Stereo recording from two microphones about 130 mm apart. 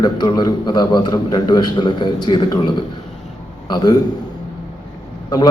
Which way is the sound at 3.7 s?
35° left (ahead or behind).